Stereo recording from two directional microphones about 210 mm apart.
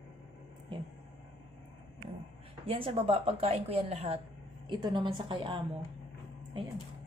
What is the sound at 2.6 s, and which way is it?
Speech, 25° right (ahead or behind).